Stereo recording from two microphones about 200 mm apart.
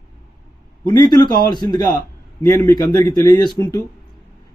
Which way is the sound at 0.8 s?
20° left (ahead or behind).